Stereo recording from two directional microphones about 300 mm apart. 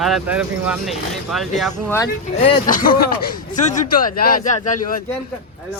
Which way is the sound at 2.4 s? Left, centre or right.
Left.